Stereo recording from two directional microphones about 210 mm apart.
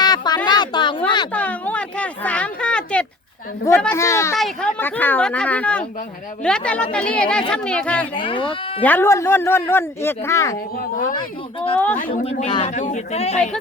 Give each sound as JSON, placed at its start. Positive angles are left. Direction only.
{"t": 0.0, "sound": "a sound", "side_deg": 20}
{"t": 1.3, "sound": "a sound", "side_deg": 5}
{"t": 3.7, "sound": "speech", "side_deg": 10}
{"t": 4.4, "sound": "a woman's voice", "side_deg": 5}
{"t": 8.1, "sound": "speech", "side_deg": 25}
{"t": 8.4, "sound": "speech", "side_deg": 10}
{"t": 11.9, "sound": "speech", "side_deg": 40}
{"t": 12.2, "sound": "speech", "side_deg": 25}